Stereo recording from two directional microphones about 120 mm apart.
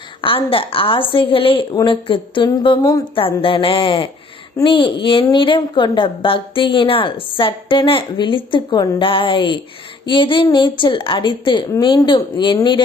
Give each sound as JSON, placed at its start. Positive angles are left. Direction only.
{"t": 0.2, "sound": "a woman's voice", "side_deg": 45}
{"t": 3.2, "sound": "a woman's voice", "side_deg": 45}